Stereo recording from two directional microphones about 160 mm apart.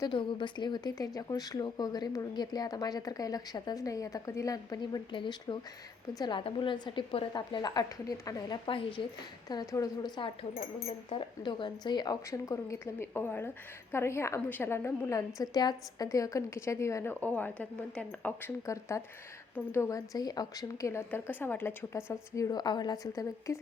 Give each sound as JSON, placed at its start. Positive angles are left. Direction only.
{"t": 0.0, "sound": "a woman's voice", "side_deg": 30}